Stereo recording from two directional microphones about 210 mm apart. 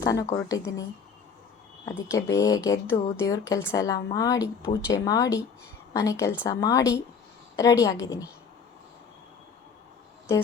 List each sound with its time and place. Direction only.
0.0 s a woman's voice: 15° left (ahead or behind)
2.0 s a woman's voice: 15° left (ahead or behind)